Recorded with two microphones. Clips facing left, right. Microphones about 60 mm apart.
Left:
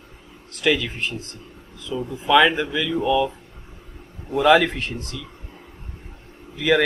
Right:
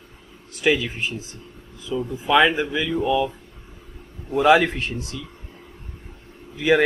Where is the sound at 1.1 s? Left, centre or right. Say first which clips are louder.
Even; left.